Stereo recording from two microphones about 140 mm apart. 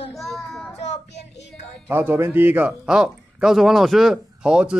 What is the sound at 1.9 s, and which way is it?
Speech, 15° right (ahead or behind).